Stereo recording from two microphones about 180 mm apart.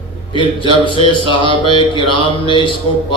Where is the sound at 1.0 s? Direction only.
30° left (ahead or behind).